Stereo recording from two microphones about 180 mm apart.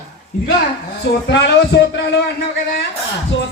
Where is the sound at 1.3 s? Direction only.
75° left (ahead or behind).